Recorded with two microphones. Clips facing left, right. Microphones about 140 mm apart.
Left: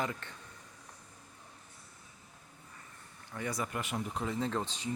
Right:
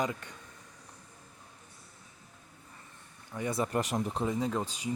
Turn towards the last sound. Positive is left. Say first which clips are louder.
# right 2 dB
turn(degrees=-10)  # may be behind; listen again after turning